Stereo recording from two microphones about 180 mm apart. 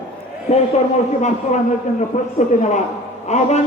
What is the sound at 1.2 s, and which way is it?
Speech, 40° left (ahead or behind).